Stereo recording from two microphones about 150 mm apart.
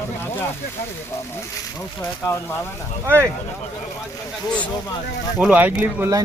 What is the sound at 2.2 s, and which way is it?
Speech, 20° left (ahead or behind).